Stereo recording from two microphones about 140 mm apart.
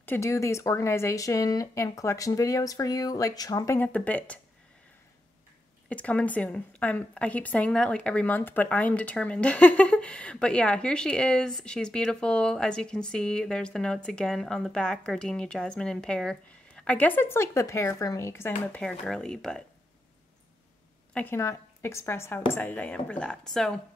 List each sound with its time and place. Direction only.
0.0 s speech: 20° left (ahead or behind)
3.8 s speech: 10° left (ahead or behind)
5.9 s speech: 10° left (ahead or behind)
21.1 s speech: 15° left (ahead or behind)